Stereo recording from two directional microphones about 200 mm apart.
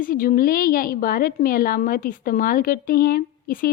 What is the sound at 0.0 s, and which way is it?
A woman's voice, 45° left (ahead or behind).